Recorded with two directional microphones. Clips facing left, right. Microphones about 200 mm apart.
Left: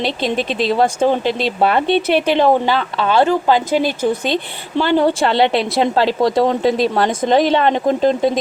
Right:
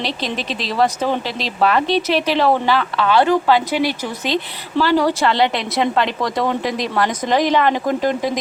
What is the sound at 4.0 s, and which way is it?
Speech, 55° left (ahead or behind).